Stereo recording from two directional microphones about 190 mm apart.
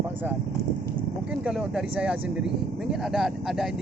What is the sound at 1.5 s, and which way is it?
Speech, 5° right (ahead or behind).